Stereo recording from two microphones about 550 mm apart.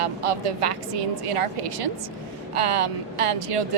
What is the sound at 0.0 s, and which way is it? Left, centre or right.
A woman's voice, right.